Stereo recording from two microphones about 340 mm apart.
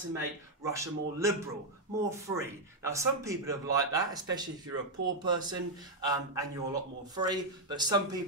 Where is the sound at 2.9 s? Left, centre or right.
Centre.